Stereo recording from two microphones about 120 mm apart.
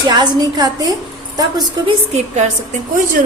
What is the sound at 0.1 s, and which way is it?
Speech, 35° right (ahead or behind).